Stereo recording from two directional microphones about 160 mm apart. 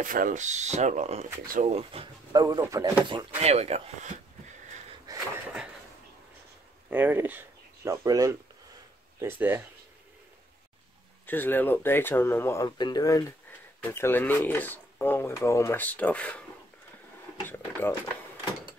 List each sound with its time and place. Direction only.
0.0 s speech: 55° right (ahead or behind); by 2.0 s 40° right (ahead or behind)
2.3 s speech: 20° right (ahead or behind)
3.3 s speech: 40° right (ahead or behind)
5.0 s a sound: 20° right (ahead or behind)
6.9 s speech: 10° right (ahead or behind)
11.2 s speech: 10° left (ahead or behind)
17.5 s speech: 10° left (ahead or behind)